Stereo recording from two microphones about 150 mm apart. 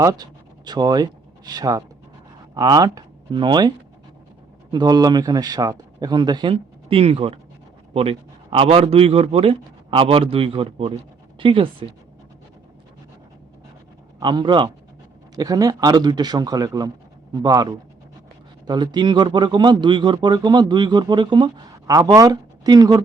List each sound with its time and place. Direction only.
0.0 s speech: 25° right (ahead or behind)
4.7 s a man's voice: 25° right (ahead or behind)
6.5 s a man's voice: 40° right (ahead or behind)
14.2 s a man's voice: 30° right (ahead or behind)